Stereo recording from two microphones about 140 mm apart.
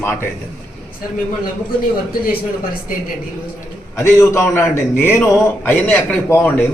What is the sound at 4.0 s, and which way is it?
A man's voice, 20° left (ahead or behind).